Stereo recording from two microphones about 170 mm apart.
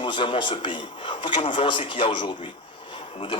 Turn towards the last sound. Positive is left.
turn(degrees=30)  # may be behind; listen again after turning